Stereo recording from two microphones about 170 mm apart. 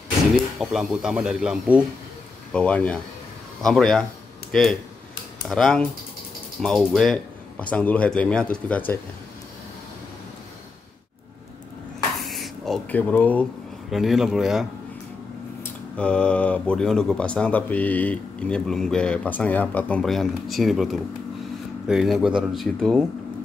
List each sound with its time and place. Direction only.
0.6 s speech: centre (ahead or behind)
2.5 s speech: 5° left (ahead or behind)
12.2 s speech: centre (ahead or behind)